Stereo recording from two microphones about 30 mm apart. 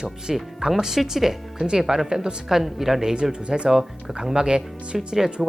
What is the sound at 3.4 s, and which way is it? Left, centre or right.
Speech, right.